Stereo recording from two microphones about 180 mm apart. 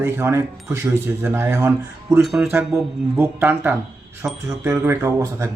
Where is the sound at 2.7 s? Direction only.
15° right (ahead or behind).